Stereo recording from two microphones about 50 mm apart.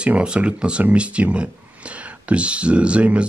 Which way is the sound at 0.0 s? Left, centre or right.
Right.